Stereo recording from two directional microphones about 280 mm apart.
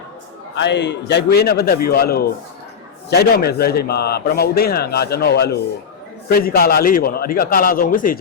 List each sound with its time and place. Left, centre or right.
0.5 s a man's voice: left